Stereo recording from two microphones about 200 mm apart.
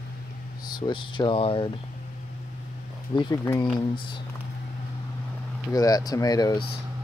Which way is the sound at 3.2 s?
20° left (ahead or behind).